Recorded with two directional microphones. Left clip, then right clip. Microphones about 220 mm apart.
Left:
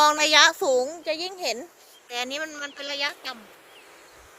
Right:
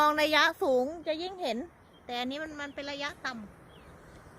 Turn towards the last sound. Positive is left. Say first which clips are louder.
# left 7 dB
turn(degrees=-5)  # may be behind; listen again after turning